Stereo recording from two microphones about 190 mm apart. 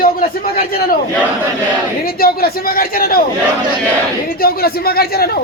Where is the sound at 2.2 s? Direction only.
50° left (ahead or behind).